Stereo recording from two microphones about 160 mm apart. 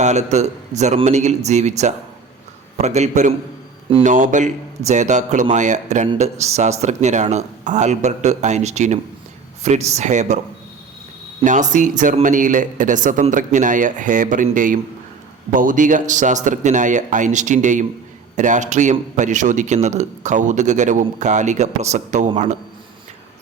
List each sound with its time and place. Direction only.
0.0 s a man's voice: 45° right (ahead or behind)
11.4 s a man's voice: 50° right (ahead or behind)